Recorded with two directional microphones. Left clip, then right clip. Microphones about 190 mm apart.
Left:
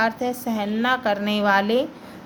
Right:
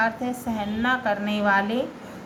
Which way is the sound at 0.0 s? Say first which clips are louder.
Left 2 dB; 50° left (ahead or behind).